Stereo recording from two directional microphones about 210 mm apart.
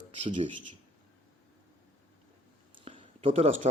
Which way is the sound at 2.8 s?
25° right (ahead or behind).